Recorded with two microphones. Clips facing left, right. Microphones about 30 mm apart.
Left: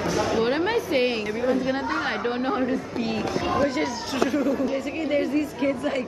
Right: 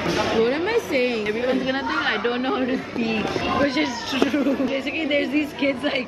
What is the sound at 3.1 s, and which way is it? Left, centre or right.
Speech, right.